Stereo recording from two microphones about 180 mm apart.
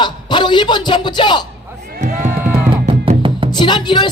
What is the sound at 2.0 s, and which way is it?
Music, 45° right (ahead or behind).